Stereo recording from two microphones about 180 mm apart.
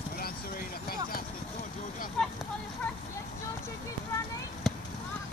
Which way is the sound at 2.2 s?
5° left (ahead or behind).